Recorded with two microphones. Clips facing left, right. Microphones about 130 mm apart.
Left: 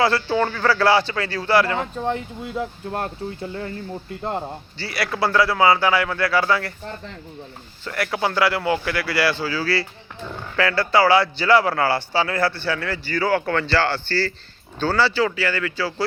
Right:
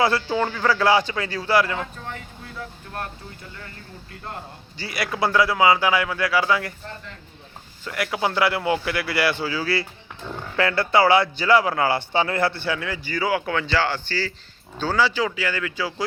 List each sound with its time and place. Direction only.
0.0 s speech: 15° right (ahead or behind)
1.8 s speech: 25° left (ahead or behind)
4.2 s speech: 30° left (ahead or behind)
4.8 s speech: 15° right (ahead or behind)
7.9 s speech: 15° right (ahead or behind)